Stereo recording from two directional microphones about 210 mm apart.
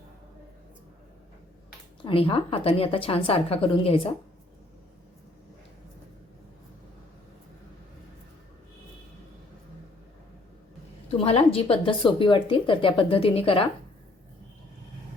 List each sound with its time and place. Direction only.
2.0 s speech: 25° left (ahead or behind)
11.2 s speech: 30° left (ahead or behind)